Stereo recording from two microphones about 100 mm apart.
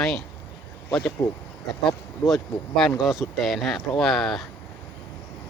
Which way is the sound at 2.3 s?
Centre (ahead or behind).